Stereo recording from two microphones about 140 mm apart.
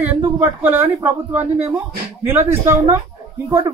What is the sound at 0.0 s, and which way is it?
Speech, 15° right (ahead or behind).